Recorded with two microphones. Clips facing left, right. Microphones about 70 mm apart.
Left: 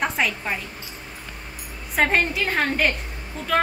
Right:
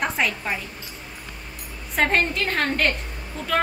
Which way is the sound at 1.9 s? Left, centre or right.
Centre.